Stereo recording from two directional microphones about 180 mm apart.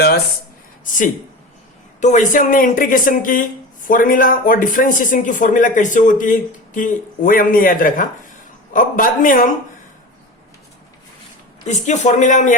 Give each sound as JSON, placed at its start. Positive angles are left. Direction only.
{"t": 2.0, "sound": "speech", "side_deg": 40}
{"t": 11.7, "sound": "speech", "side_deg": 40}